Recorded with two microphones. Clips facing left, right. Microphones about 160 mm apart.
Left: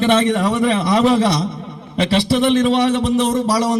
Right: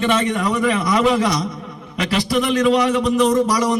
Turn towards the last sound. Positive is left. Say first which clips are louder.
# right 1 dB
turn(degrees=35)  # may be behind; listen again after turning